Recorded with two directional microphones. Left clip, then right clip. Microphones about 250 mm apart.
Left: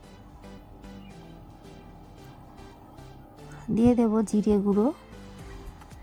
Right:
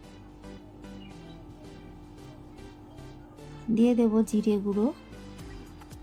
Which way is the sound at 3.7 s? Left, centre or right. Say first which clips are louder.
Left 1 dB; left.